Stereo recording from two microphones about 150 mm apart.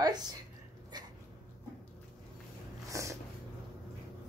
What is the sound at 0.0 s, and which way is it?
Speech, 25° right (ahead or behind).